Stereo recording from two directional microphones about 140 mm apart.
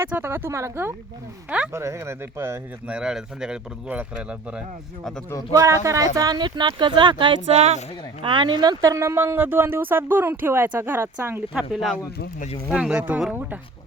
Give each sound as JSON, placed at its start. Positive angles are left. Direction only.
{"t": 0.0, "sound": "speech", "side_deg": -15}
{"t": 1.5, "sound": "speech", "side_deg": -10}
{"t": 1.7, "sound": "speech", "side_deg": -20}
{"t": 5.5, "sound": "speech", "side_deg": -20}
{"t": 11.5, "sound": "speech", "side_deg": 0}